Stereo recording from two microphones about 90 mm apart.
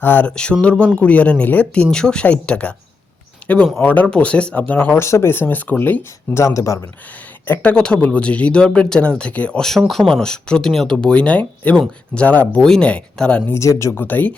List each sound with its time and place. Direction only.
0.0 s speech: 20° left (ahead or behind)
4.9 s speech: 30° left (ahead or behind)
6.4 s speech: 35° left (ahead or behind)
7.4 s speech: 20° left (ahead or behind)
13.5 s speech: 35° left (ahead or behind)